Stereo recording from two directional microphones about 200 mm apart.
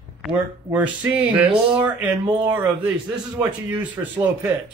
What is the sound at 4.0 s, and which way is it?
Speech, 15° right (ahead or behind).